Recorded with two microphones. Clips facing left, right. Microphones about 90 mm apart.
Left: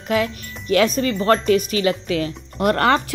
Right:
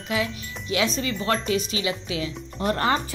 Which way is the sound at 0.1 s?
50° left (ahead or behind).